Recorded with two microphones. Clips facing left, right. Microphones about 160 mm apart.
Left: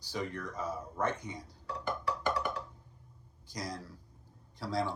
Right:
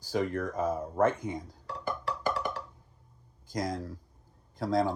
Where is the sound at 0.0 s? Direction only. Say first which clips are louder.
Right 8 dB; 50° right (ahead or behind).